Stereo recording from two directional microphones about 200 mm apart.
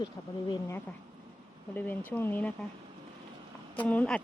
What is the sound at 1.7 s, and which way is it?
Speech, 10° left (ahead or behind).